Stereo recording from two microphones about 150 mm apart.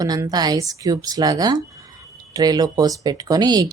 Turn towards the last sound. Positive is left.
turn(degrees=-25)  # may be behind; listen again after turning